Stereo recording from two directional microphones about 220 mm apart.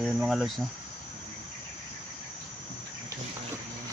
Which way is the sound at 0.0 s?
Centre (ahead or behind).